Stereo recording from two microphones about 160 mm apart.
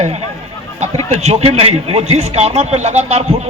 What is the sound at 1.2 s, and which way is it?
A man's voice, 40° right (ahead or behind).